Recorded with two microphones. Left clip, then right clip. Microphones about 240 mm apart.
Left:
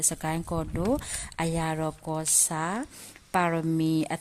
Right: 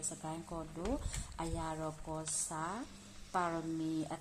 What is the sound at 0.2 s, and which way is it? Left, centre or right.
A woman's voice, left.